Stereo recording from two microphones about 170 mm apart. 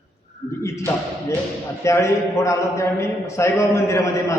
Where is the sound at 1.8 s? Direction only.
15° left (ahead or behind).